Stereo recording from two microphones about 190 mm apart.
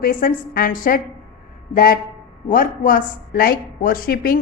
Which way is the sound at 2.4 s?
45° left (ahead or behind).